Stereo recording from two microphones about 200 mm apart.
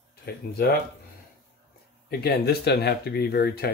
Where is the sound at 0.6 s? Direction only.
50° left (ahead or behind).